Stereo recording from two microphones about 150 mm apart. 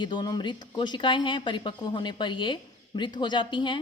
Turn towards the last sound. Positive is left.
turn(degrees=30)  # may be behind; listen again after turning